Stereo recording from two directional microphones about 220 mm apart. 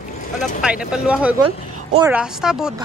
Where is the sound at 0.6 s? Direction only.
5° right (ahead or behind).